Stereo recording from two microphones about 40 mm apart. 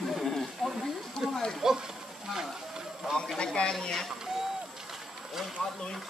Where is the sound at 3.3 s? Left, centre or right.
Left.